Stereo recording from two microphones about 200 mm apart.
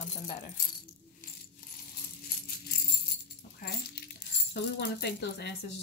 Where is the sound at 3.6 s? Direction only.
50° left (ahead or behind).